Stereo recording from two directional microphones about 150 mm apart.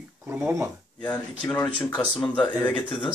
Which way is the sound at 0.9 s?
10° left (ahead or behind).